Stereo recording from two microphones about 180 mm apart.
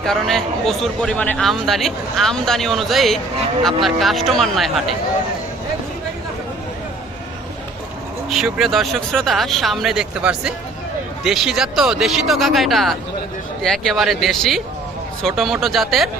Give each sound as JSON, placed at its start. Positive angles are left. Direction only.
{"t": 0.0, "sound": "speech", "side_deg": 0}
{"t": 8.3, "sound": "speech", "side_deg": 0}